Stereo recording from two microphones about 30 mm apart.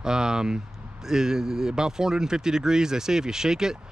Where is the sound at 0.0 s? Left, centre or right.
Right.